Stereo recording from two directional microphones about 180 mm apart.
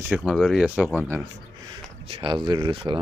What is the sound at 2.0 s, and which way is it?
Speech, 30° right (ahead or behind).